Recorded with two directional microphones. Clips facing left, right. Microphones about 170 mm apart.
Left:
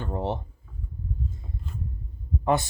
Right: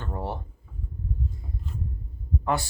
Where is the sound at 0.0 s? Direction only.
20° left (ahead or behind).